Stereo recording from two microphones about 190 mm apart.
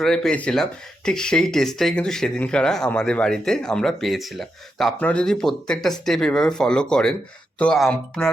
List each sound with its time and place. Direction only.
0.0 s speech: centre (ahead or behind)